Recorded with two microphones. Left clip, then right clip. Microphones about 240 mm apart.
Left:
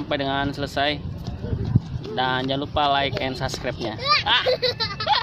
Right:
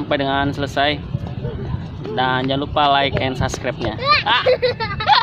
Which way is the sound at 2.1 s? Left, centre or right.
Centre.